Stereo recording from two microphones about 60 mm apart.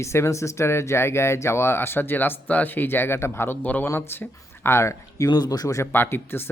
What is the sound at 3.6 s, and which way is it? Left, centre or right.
Speech, left.